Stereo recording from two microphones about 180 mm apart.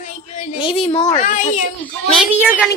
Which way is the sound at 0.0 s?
45° left (ahead or behind).